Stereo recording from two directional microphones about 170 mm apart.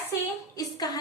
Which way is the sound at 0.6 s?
20° left (ahead or behind).